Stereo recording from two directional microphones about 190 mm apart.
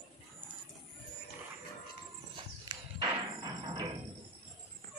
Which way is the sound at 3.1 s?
20° right (ahead or behind).